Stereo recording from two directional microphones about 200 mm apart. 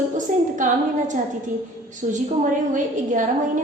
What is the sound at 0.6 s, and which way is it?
Speech, 40° right (ahead or behind).